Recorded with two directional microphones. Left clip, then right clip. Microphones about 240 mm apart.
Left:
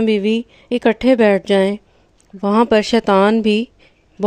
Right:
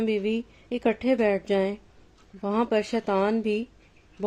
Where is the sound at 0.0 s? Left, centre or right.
Left.